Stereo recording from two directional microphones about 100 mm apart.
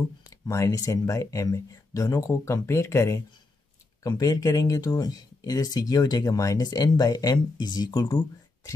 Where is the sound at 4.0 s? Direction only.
40° left (ahead or behind).